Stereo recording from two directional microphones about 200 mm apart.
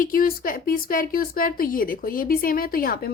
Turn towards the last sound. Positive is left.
turn(degrees=45)  # may be behind; listen again after turning